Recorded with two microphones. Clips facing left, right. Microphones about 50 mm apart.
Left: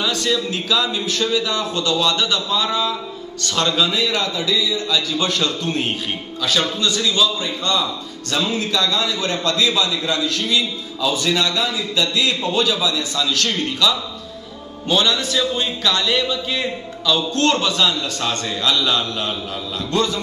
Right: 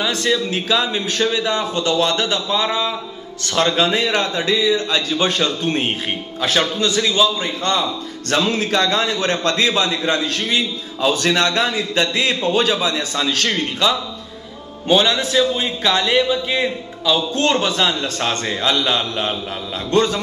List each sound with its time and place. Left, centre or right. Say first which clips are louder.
0.3 s a man's voice: right 3 dB; right
3.7 s a man's voice: right 2 dB; right
8.3 s a man's voice: right 3 dB; right
19.9 s a man's voice: right 4 dB; right